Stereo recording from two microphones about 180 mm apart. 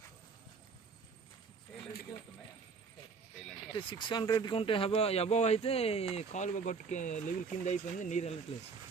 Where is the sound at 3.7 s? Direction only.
25° left (ahead or behind); by 8.3 s 40° left (ahead or behind).